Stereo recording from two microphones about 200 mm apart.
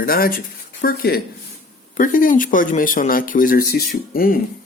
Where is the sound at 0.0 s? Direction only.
45° left (ahead or behind).